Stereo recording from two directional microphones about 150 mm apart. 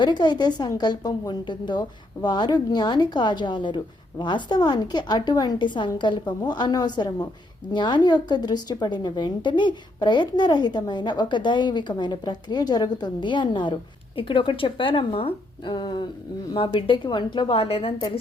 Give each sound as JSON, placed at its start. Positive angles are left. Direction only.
{"t": 0.0, "sound": "a woman's voice", "side_deg": 30}